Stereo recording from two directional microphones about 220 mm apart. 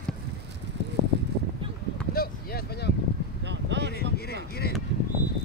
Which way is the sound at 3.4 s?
50° right (ahead or behind).